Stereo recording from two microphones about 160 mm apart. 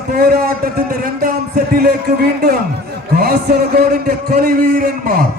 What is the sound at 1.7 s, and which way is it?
A man's voice, 75° right (ahead or behind).